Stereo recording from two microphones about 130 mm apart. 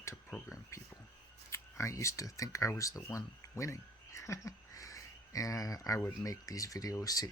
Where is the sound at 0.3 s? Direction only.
20° left (ahead or behind).